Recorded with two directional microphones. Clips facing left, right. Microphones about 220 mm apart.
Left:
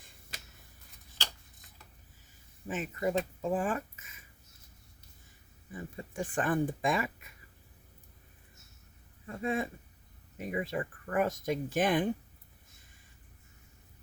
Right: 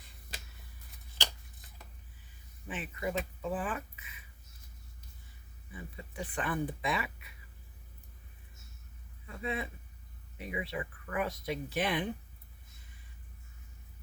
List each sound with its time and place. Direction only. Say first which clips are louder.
2.6 s speech: left 5 dB; 45° left (ahead or behind)
5.7 s speech: left 5 dB; 45° left (ahead or behind)
9.2 s speech: left 5 dB; 45° left (ahead or behind)